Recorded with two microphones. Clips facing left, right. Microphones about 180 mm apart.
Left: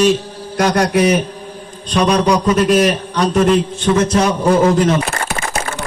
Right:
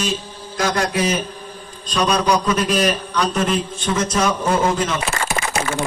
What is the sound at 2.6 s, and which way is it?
A man's voice, 70° left (ahead or behind).